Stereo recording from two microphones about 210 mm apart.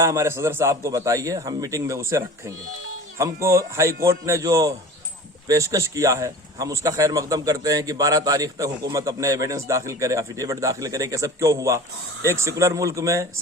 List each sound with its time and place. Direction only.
0.0 s speech: 15° right (ahead or behind)